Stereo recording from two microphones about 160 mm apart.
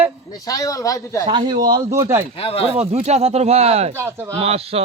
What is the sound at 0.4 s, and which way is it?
Speech, 20° left (ahead or behind).